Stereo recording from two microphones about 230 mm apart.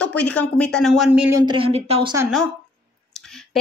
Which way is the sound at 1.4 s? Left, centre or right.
Right.